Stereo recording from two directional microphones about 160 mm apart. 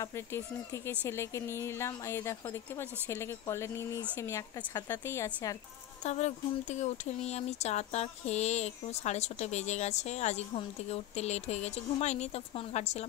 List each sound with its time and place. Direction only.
0.0 s speech: 15° left (ahead or behind)
6.0 s speech: 45° left (ahead or behind)